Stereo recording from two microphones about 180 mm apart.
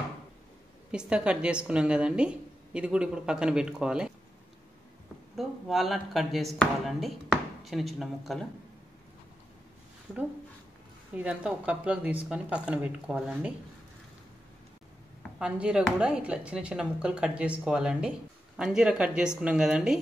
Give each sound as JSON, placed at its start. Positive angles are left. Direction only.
{"t": 0.9, "sound": "a woman's voice", "side_deg": -5}
{"t": 5.3, "sound": "a woman's voice", "side_deg": 0}
{"t": 11.1, "sound": "speech", "side_deg": -5}
{"t": 15.3, "sound": "a woman's voice", "side_deg": -5}